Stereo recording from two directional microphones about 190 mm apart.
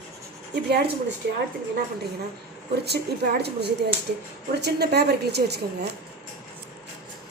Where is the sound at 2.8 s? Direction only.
60° right (ahead or behind).